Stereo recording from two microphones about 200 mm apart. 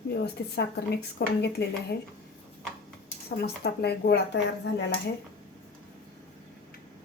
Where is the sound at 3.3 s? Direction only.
55° left (ahead or behind).